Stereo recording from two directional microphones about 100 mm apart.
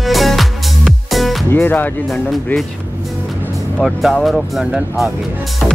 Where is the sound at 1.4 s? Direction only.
20° left (ahead or behind).